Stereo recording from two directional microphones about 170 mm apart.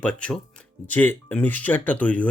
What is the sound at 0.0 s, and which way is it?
Speech, 5° left (ahead or behind).